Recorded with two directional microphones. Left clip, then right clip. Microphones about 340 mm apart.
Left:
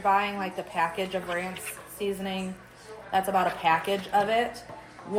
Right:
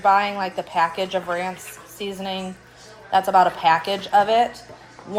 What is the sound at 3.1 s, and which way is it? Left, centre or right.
Speech, right.